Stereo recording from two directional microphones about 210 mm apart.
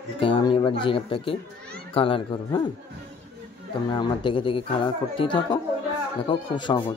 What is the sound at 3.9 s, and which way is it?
Speech, 25° left (ahead or behind).